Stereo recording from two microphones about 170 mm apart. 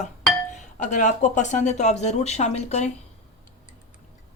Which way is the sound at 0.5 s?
45° left (ahead or behind).